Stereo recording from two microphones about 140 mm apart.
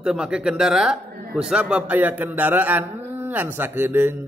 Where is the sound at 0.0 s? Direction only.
5° right (ahead or behind).